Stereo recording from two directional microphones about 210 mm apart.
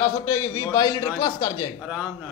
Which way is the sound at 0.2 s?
15° left (ahead or behind).